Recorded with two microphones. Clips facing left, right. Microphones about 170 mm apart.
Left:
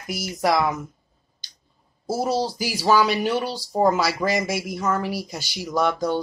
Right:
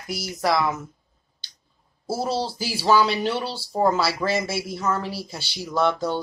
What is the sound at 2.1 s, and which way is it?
Speech, 15° left (ahead or behind).